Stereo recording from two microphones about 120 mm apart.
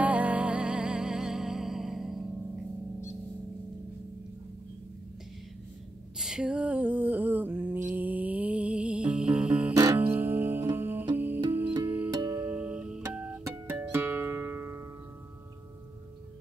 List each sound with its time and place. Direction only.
0.0 s music: 10° right (ahead or behind)
6.1 s a sound: 5° right (ahead or behind)
7.9 s music: 15° right (ahead or behind)